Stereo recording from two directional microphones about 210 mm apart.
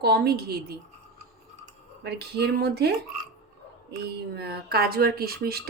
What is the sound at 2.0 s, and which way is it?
A woman's voice, 50° right (ahead or behind).